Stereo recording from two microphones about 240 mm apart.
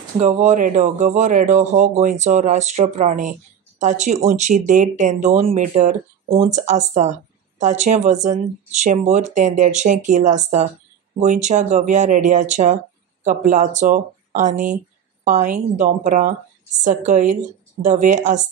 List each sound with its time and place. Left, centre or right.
0.2 s speech: right